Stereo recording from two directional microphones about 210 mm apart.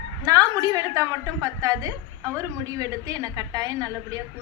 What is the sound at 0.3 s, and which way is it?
A woman's voice, 15° right (ahead or behind).